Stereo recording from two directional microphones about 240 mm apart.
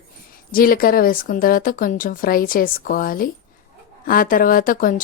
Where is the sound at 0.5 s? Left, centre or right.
Left.